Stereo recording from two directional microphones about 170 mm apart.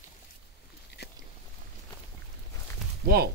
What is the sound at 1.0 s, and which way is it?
Biting, 75° left (ahead or behind).